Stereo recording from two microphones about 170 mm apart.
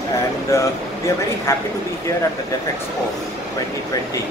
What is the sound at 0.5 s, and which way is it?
Speech, 15° left (ahead or behind).